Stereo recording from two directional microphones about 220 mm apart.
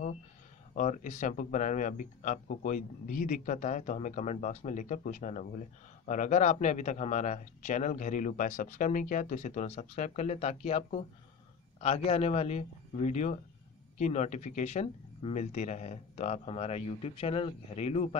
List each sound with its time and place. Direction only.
0.7 s speech: 35° left (ahead or behind)